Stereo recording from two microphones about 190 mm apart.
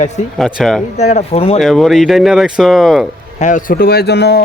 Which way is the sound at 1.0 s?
35° left (ahead or behind).